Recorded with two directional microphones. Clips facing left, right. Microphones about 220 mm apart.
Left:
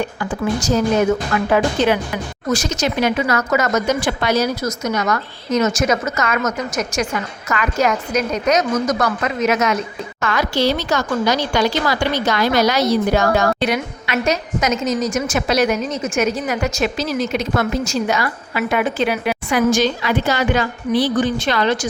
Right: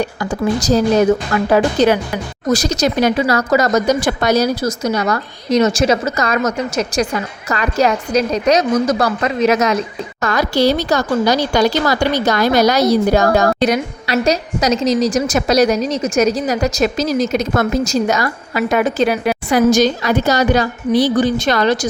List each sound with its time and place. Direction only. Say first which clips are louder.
0.0 s speech: right 3 dB; 40° right (ahead or behind)